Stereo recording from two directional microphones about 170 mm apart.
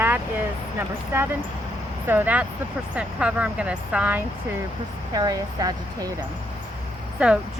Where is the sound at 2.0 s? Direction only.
10° right (ahead or behind).